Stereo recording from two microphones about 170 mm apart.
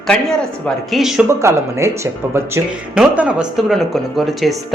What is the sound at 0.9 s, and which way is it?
Speech, centre (ahead or behind).